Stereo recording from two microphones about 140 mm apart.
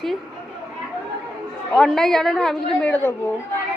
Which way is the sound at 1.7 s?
Centre (ahead or behind).